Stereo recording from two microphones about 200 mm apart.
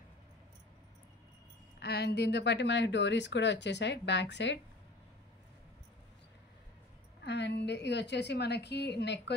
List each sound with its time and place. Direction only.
1.8 s speech: 55° left (ahead or behind)
7.2 s speech: 60° left (ahead or behind)